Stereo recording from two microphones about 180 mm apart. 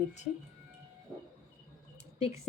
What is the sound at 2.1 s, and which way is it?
Speech, 35° left (ahead or behind).